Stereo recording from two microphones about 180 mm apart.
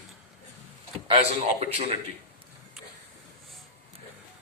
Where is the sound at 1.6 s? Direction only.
35° right (ahead or behind).